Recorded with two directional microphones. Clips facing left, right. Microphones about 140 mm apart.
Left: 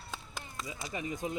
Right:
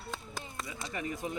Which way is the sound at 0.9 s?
20° left (ahead or behind).